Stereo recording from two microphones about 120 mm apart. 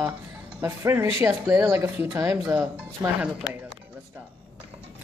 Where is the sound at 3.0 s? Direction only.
30° right (ahead or behind).